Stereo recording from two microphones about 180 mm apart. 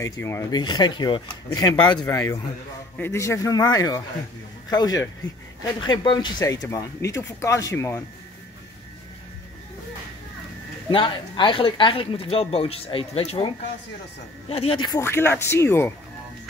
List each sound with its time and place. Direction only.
0.0 s speech: 15° left (ahead or behind)
10.9 s speech: 25° left (ahead or behind)
14.5 s speech: 30° left (ahead or behind); by 15.9 s 15° left (ahead or behind)